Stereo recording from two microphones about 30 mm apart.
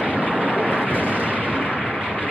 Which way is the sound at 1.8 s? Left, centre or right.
Centre.